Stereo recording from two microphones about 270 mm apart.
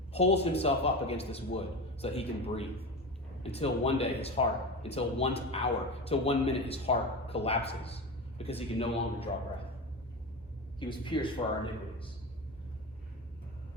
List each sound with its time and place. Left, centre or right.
0.1 s speech: left
10.8 s a man's voice: centre